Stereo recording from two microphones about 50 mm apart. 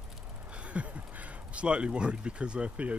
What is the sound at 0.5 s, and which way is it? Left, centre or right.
Speech, right.